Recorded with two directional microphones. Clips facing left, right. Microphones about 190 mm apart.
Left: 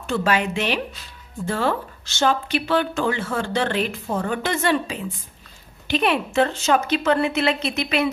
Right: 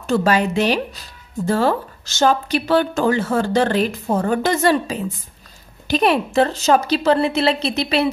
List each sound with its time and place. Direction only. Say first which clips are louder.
0.0 s speech: right 5 dB; 40° right (ahead or behind)